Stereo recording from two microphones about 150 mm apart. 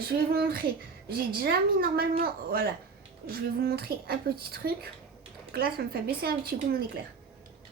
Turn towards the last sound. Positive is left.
turn(degrees=-80)